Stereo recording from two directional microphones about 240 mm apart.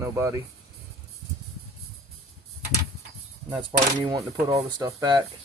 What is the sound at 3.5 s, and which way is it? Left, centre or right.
Speech, centre.